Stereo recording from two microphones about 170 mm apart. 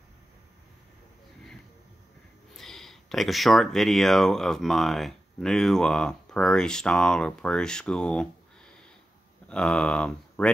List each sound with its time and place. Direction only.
2.5 s speech: centre (ahead or behind)